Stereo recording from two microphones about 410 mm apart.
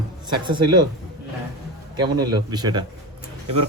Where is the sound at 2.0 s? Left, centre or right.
Centre.